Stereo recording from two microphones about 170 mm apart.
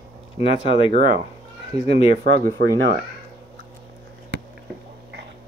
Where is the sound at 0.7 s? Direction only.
30° left (ahead or behind).